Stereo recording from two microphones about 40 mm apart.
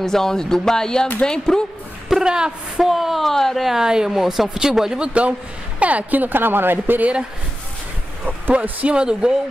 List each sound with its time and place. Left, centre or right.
0.0 s speech: centre
2.0 s speech: centre
2.8 s speech: centre
3.3 s speech: centre
3.6 s speech: centre
4.2 s speech: centre
5.0 s a man's voice: right
8.8 s speech: right